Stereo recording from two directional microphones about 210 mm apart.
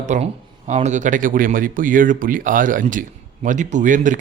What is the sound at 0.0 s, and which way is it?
Speech, 35° right (ahead or behind).